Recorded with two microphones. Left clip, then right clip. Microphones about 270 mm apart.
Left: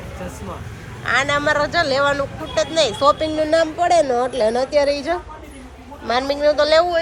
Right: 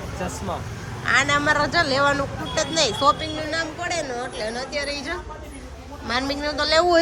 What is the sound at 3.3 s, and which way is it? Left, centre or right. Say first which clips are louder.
A woman's voice: left 10 dB; centre.